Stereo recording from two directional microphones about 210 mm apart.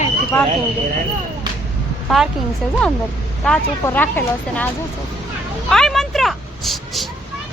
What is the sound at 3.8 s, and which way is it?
Speech, 10° left (ahead or behind).